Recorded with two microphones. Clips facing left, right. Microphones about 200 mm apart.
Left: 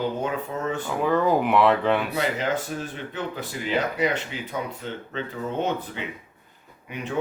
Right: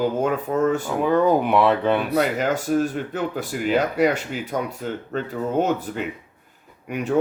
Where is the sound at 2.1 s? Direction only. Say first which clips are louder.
Right 4 dB; 50° right (ahead or behind).